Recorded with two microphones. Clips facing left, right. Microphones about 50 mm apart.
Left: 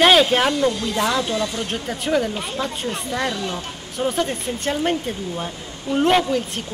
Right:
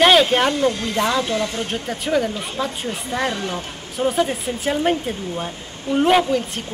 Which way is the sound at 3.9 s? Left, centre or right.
Centre.